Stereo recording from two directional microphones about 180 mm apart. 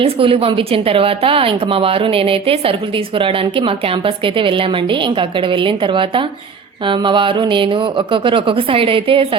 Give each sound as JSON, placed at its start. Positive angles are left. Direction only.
{"t": 0.0, "sound": "a woman's voice", "side_deg": -30}